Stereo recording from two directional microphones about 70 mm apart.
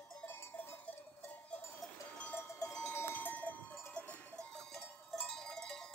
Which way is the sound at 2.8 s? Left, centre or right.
Left.